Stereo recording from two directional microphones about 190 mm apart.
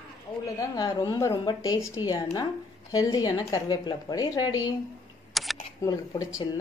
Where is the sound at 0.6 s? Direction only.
20° left (ahead or behind).